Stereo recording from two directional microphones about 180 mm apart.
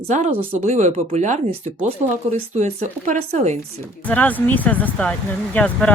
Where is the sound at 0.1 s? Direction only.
35° right (ahead or behind).